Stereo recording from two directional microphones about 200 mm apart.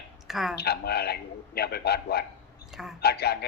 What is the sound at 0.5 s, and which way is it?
A man's voice, 50° left (ahead or behind).